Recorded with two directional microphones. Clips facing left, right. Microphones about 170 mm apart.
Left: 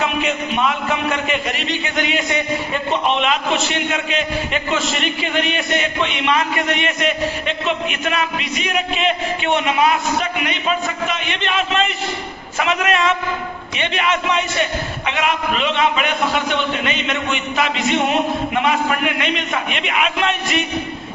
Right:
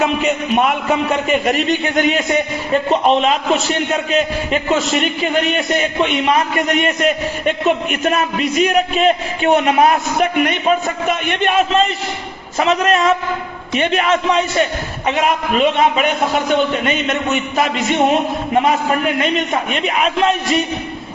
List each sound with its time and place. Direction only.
0.5 s a man's voice: 50° right (ahead or behind)
18.5 s a man's voice: 35° right (ahead or behind)